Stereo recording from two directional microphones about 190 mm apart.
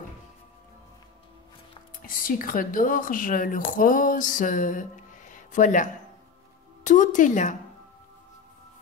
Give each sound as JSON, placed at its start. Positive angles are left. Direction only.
{"t": 2.0, "sound": "a woman's voice", "side_deg": 45}